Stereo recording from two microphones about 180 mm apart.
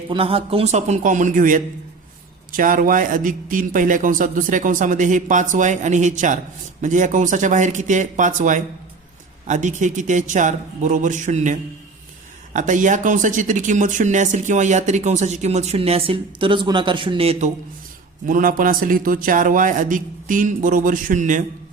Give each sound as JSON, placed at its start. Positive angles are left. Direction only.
{"t": 0.1, "sound": "a man's voice", "side_deg": -30}
{"t": 12.5, "sound": "speech", "side_deg": -45}
{"t": 18.3, "sound": "a man's voice", "side_deg": -50}